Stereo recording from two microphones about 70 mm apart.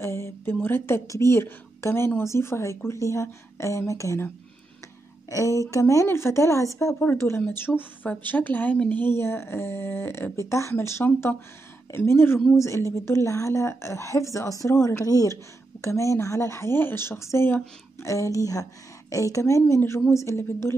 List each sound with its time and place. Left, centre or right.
0.0 s speech: left
1.0 s a woman's voice: left
5.3 s a woman's voice: left
7.0 s a woman's voice: left
12.5 s a woman's voice: left
15.0 s a woman's voice: left
15.8 s a woman's voice: left